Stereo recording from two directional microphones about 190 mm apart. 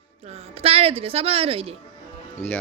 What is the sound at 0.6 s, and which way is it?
A woman's voice, 30° right (ahead or behind).